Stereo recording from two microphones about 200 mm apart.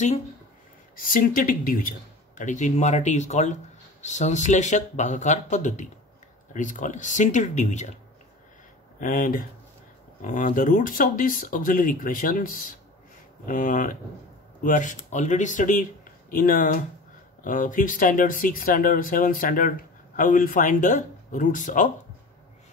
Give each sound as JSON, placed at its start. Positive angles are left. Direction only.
{"t": 0.9, "sound": "speech", "side_deg": 45}
{"t": 9.0, "sound": "speech", "side_deg": 45}